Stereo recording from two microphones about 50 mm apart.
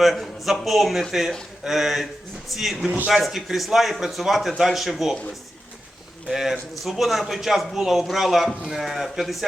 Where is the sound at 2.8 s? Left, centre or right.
Right.